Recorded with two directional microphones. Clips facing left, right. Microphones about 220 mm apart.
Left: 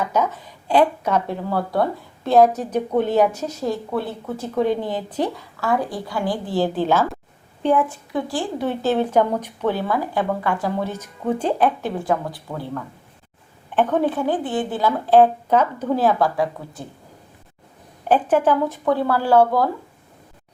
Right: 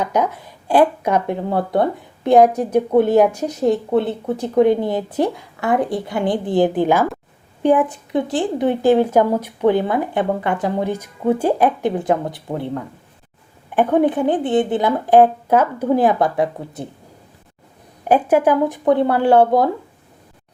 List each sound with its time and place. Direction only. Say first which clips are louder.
0.0 s speech: right 2 dB; 15° right (ahead or behind)
18.1 s speech: right 3 dB; 10° right (ahead or behind)